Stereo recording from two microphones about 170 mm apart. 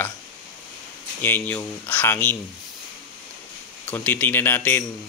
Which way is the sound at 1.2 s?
10° left (ahead or behind).